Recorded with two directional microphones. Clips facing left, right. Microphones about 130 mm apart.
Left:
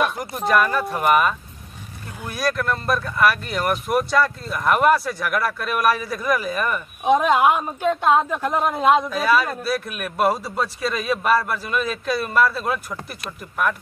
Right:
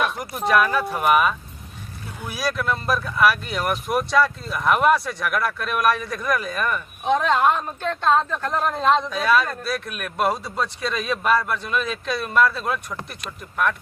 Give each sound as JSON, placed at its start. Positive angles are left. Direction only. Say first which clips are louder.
{"t": 0.0, "sound": "speech", "louder": "left 2 dB", "side_deg": 0}